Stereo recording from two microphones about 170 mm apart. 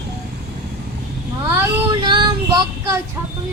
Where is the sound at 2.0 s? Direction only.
25° right (ahead or behind).